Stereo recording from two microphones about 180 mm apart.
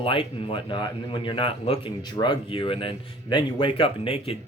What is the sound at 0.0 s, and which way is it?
A man's voice, 30° left (ahead or behind).